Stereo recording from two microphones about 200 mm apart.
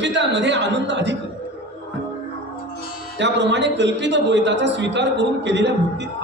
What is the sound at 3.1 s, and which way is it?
A man's voice, 60° right (ahead or behind).